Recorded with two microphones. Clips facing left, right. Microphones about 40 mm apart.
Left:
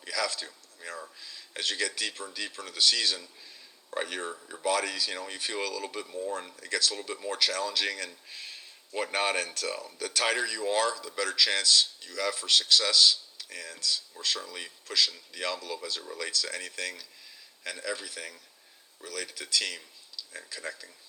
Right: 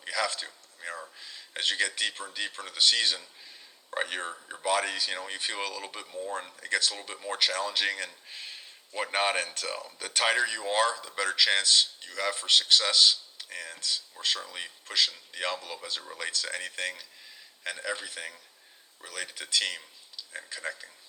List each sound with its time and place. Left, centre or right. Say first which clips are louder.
0.0 s a man's voice: right 1 dB; right
6.6 s speech: right 3 dB; right